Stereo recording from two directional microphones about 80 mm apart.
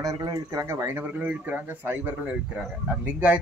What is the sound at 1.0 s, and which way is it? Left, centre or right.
Speech, right.